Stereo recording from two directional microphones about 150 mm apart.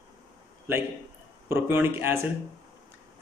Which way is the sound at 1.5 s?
15° right (ahead or behind).